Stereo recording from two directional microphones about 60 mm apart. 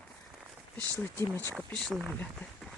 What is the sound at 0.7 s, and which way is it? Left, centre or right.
Speech, left.